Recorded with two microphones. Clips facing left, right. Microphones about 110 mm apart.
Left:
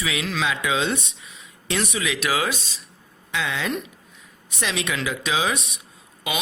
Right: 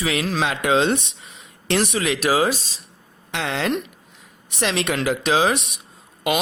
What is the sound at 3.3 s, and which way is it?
A woman's voice, 65° right (ahead or behind).